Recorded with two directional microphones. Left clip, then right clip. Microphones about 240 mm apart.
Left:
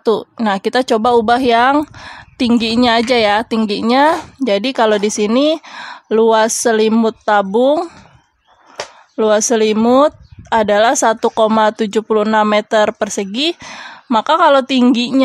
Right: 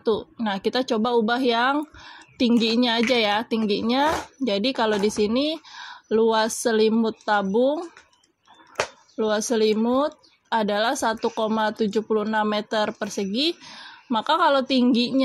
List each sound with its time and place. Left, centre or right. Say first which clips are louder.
0.0 s a woman's voice: left 9 dB; left
9.1 s a woman's voice: left 11 dB; left